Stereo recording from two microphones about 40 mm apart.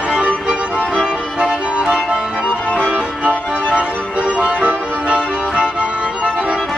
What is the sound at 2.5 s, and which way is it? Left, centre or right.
Music, left.